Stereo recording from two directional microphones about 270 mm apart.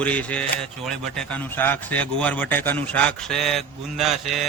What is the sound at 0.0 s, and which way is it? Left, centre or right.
A man's voice, centre.